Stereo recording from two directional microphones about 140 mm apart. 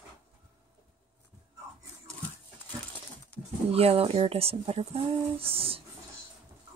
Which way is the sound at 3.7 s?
45° right (ahead or behind).